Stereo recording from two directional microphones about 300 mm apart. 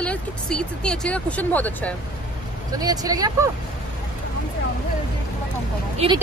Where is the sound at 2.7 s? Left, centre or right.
Centre.